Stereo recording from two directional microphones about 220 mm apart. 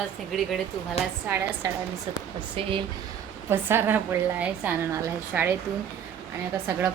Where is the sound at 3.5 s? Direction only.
10° right (ahead or behind).